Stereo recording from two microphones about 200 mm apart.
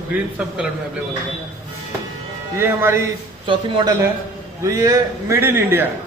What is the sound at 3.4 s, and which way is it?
A man's voice, 25° right (ahead or behind).